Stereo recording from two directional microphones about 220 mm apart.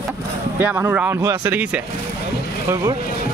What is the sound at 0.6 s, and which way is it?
Speech, 10° right (ahead or behind).